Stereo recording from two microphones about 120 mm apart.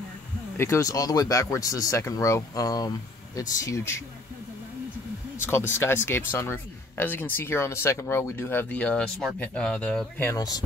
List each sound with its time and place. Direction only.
0.6 s speech: 25° left (ahead or behind)
5.4 s speech: 20° left (ahead or behind)
10.3 s speech: 30° left (ahead or behind)